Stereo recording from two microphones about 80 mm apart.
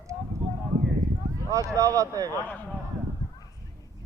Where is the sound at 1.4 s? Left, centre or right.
Right.